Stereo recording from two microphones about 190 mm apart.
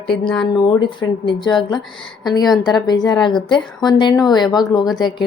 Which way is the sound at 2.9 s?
20° left (ahead or behind).